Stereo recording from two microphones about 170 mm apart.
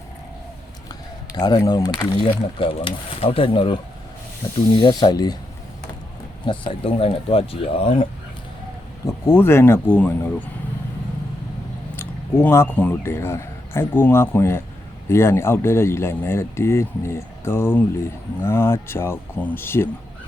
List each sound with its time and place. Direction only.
1.4 s speech: 25° left (ahead or behind)
4.8 s speech: 25° left (ahead or behind)
6.5 s speech: 25° left (ahead or behind)
9.0 s speech: 15° left (ahead or behind)
11.9 s speech: 15° left (ahead or behind)